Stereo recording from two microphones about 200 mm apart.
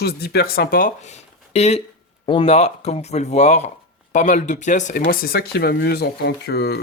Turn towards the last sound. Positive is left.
turn(degrees=55)  # may be behind; listen again after turning